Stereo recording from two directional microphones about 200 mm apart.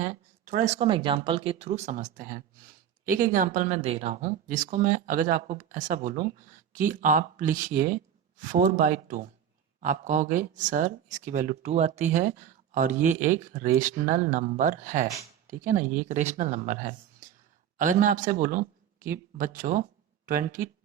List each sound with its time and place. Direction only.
0.0 s speech: 35° right (ahead or behind)
3.8 s speech: 30° right (ahead or behind)